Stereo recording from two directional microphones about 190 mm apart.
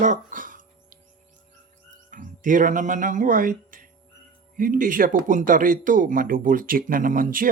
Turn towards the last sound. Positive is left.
turn(degrees=-45)  # may be behind; listen again after turning